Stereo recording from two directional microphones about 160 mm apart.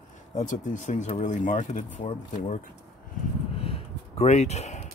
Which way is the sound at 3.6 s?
40° left (ahead or behind).